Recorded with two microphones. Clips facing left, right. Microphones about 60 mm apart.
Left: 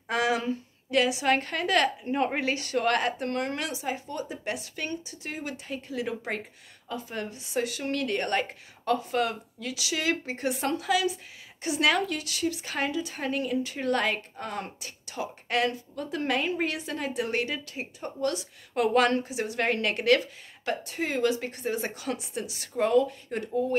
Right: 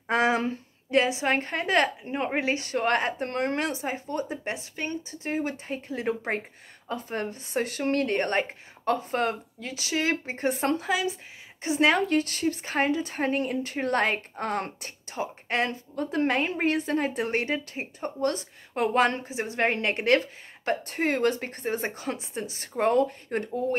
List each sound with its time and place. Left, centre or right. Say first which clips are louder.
0.1 s a woman's voice: right 3 dB; right
2.0 s a woman's voice: even; centre; by 14.4 s right
14.4 s speech: right 5 dB; right
15.0 s a woman's voice: right 2 dB; right
18.8 s a woman's voice: left 1 dB; right